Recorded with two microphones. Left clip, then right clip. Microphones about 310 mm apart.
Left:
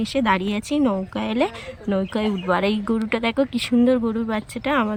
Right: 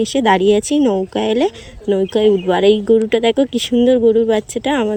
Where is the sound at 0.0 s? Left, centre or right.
Centre.